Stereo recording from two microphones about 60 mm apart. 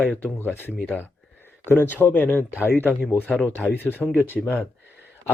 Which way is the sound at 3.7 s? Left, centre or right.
Left.